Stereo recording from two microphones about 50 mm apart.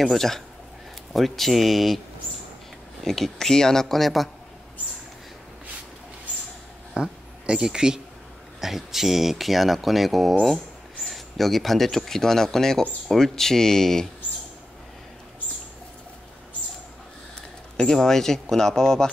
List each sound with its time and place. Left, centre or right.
0.0 s speech: centre
3.0 s speech: centre
7.0 s a man's voice: centre
17.7 s speech: centre